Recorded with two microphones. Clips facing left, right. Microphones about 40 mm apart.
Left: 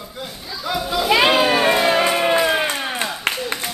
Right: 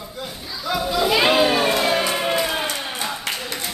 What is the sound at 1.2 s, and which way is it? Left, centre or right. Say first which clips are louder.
Children playing: even; centre.